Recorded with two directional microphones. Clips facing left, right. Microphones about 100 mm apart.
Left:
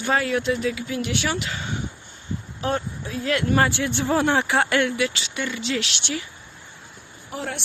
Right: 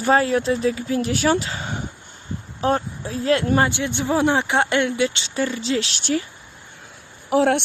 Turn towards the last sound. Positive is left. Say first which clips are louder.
# right 14 dB
turn(degrees=-80)